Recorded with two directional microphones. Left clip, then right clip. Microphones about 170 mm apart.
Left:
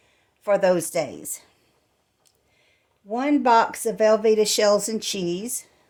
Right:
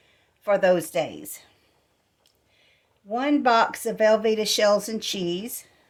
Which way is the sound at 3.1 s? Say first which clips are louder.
Left 2 dB; 40° left (ahead or behind).